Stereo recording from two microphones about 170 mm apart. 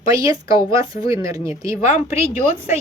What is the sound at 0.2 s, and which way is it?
Speech, 20° right (ahead or behind).